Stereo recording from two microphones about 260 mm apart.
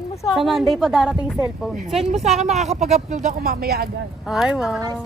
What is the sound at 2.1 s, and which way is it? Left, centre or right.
Speech, right.